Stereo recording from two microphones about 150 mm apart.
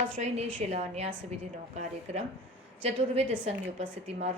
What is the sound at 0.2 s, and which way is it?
A woman's voice, 45° right (ahead or behind).